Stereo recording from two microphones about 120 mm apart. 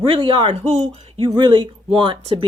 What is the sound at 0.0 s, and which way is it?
A woman's voice, 45° right (ahead or behind).